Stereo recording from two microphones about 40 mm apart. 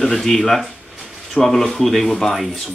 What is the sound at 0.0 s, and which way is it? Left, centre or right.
Speech, centre.